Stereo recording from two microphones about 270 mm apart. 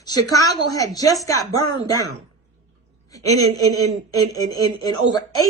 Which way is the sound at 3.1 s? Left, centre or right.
Centre.